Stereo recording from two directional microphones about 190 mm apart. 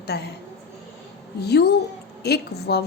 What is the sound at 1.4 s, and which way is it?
A woman's voice, 60° left (ahead or behind).